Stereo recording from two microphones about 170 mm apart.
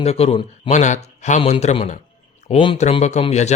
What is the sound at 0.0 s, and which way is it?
Speech, 40° left (ahead or behind).